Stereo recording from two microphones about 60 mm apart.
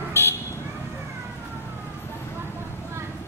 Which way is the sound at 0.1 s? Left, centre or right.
Left.